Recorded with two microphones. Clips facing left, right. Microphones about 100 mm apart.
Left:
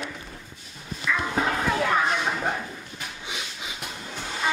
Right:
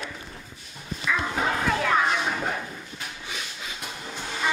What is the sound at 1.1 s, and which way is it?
Dog, 10° right (ahead or behind).